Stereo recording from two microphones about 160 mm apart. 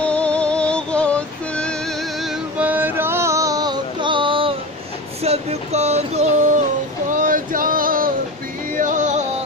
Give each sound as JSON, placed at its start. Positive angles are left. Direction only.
{"t": 0.0, "sound": "music", "side_deg": 5}
{"t": 2.6, "sound": "music", "side_deg": -10}
{"t": 5.2, "sound": "a sound", "side_deg": -40}
{"t": 7.1, "sound": "male singing", "side_deg": -55}
{"t": 8.7, "sound": "music", "side_deg": -55}